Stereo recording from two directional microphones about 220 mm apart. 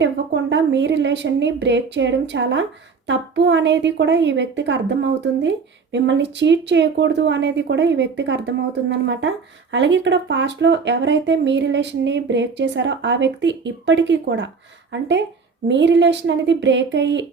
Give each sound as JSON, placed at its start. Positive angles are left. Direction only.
{"t": 0.5, "sound": "a woman's voice", "side_deg": -55}